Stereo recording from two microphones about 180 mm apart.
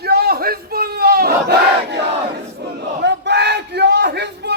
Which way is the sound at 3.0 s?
70° right (ahead or behind).